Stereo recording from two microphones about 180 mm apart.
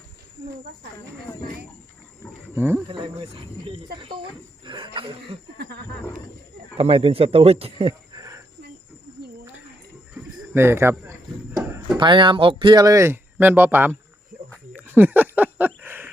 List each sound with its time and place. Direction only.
2.6 s speech: 10° right (ahead or behind)
2.9 s speech: 25° right (ahead or behind)
6.7 s speech: 35° right (ahead or behind)
10.5 s a sound: 15° right (ahead or behind)
11.9 s speech: 25° right (ahead or behind); by 13.9 s 10° right (ahead or behind)
14.8 s a sound: 10° right (ahead or behind)